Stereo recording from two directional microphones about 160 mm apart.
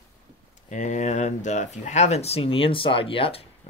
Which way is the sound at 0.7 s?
50° left (ahead or behind).